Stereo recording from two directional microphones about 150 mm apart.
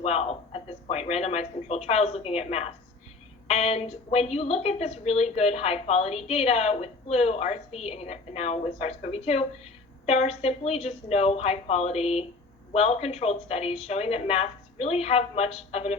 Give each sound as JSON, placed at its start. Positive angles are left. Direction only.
{"t": 0.0, "sound": "a woman's voice", "side_deg": 45}